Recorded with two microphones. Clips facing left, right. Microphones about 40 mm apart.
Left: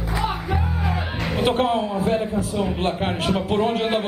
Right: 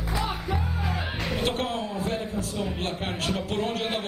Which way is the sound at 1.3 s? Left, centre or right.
Centre.